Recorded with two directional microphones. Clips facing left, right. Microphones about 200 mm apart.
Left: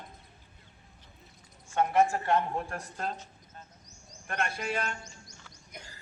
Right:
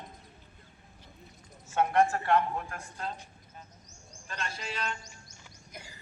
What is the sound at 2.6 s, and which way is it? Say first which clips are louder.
Speech: left 4 dB; 35° left (ahead or behind).